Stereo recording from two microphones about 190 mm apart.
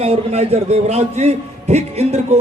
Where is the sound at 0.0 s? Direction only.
35° right (ahead or behind).